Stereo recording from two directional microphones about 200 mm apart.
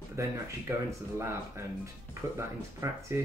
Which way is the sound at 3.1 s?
15° right (ahead or behind).